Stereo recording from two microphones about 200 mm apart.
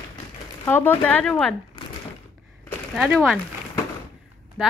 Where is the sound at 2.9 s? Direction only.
Centre (ahead or behind).